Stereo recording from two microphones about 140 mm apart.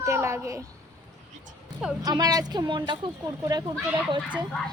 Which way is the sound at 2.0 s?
30° right (ahead or behind).